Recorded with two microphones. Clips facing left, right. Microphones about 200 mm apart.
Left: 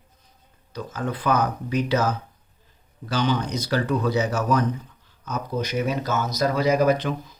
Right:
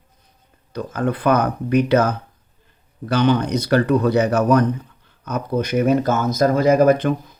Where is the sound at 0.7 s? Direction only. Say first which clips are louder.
Right 7 dB; 55° right (ahead or behind).